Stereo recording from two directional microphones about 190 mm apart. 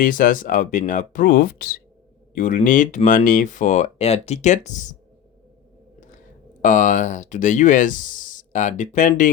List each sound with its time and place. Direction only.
0.0 s speech: 45° left (ahead or behind)
6.6 s speech: 40° left (ahead or behind)